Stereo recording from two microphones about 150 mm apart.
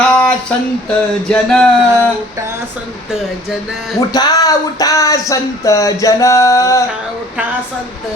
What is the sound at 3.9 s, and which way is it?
Speech, 25° left (ahead or behind).